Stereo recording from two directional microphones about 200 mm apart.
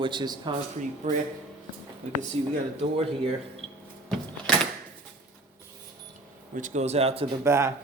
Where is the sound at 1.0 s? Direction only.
40° right (ahead or behind).